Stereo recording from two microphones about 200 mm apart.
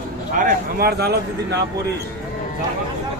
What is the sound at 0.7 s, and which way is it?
Speech, 50° right (ahead or behind).